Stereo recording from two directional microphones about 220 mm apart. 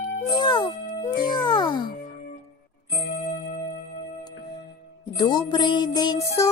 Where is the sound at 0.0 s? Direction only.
20° left (ahead or behind).